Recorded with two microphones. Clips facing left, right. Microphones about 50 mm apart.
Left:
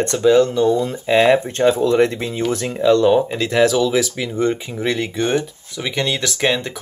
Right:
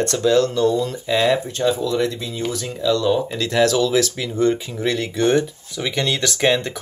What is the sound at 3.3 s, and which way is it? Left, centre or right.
Speech, centre.